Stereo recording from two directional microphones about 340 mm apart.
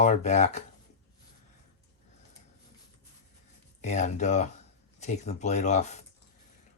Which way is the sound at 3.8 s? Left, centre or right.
Left.